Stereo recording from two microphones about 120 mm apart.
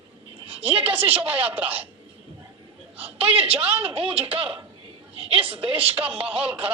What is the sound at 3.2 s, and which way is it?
A woman's voice, 50° right (ahead or behind).